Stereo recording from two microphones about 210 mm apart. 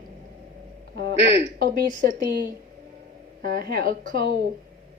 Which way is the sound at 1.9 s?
40° right (ahead or behind).